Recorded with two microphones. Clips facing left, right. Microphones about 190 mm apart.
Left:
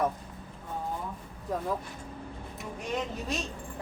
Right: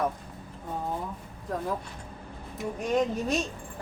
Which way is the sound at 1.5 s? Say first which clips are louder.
Even; centre (ahead or behind).